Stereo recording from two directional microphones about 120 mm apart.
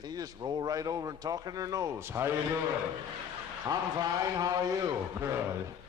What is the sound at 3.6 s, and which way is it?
Speech, 30° right (ahead or behind).